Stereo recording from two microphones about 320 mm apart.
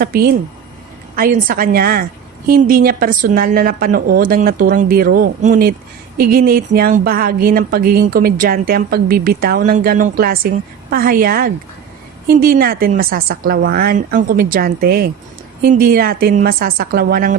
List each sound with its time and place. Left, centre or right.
0.0 s speech: right